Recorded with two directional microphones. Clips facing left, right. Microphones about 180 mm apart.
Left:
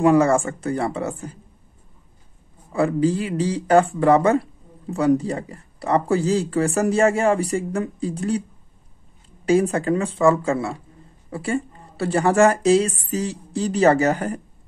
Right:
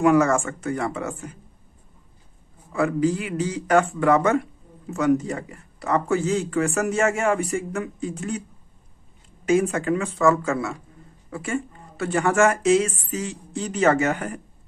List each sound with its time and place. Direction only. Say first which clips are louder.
0.0 s speech: left 2 dB; 30° left (ahead or behind)
2.7 s speech: left 2 dB; 30° left (ahead or behind)
9.5 s speech: left 2 dB; 35° left (ahead or behind)